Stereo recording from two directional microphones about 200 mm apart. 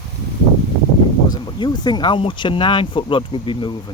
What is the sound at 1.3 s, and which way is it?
Speech, 20° left (ahead or behind).